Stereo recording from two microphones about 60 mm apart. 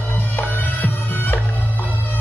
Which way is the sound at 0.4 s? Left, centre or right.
Left.